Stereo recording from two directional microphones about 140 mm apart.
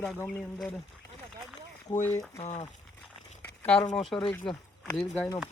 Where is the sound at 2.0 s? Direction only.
20° left (ahead or behind).